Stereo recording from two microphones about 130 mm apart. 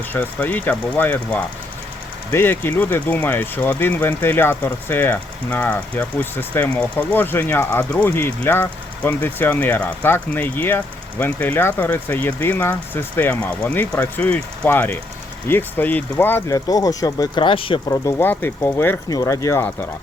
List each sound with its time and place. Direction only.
0.1 s speech: 10° left (ahead or behind)
16.6 s speech: 25° left (ahead or behind)
17.8 s speech: 25° left (ahead or behind)